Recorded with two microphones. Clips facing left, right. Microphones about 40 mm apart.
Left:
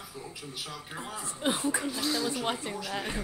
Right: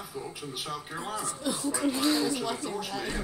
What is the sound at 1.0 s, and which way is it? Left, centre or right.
Speech, right.